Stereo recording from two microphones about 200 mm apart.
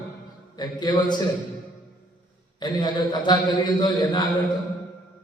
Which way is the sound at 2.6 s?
20° left (ahead or behind).